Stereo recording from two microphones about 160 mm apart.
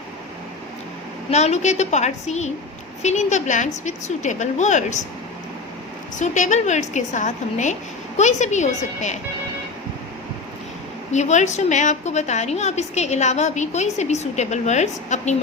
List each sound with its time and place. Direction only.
1.3 s a woman's voice: 45° left (ahead or behind)
6.1 s a woman's voice: 50° left (ahead or behind)
11.1 s a woman's voice: 45° left (ahead or behind)